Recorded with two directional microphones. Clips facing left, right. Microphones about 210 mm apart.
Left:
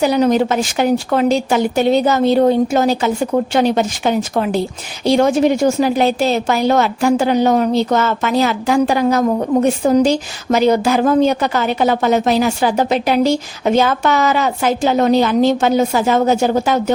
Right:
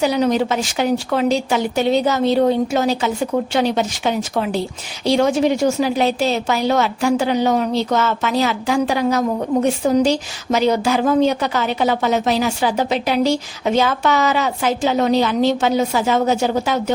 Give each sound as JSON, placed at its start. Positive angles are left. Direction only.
{"t": 0.0, "sound": "a woman's voice", "side_deg": 50}